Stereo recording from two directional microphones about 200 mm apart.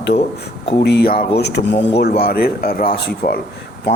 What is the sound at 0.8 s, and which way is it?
Speech, 55° left (ahead or behind).